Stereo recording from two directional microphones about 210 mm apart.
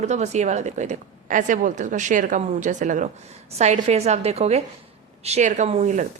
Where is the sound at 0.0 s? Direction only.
35° right (ahead or behind).